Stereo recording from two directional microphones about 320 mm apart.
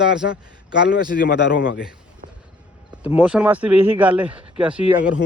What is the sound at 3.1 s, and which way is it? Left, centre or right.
A man's voice, centre.